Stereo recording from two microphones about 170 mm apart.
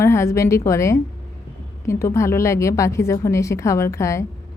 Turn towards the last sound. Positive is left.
turn(degrees=15)  # may be behind; listen again after turning